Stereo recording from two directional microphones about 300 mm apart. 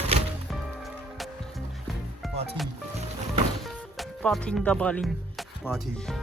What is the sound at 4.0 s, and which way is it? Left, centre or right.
Speech, centre.